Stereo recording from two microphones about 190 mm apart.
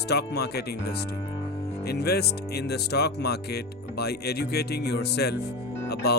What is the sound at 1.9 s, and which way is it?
Speech, 55° left (ahead or behind).